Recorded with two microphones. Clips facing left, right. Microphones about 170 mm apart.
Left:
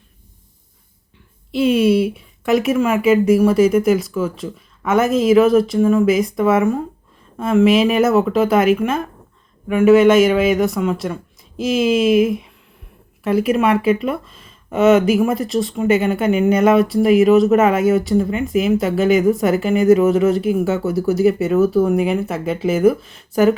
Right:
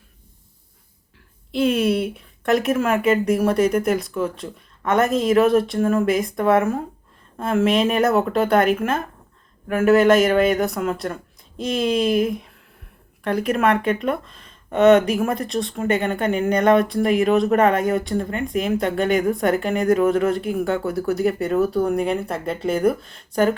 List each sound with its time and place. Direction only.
1.5 s speech: centre (ahead or behind)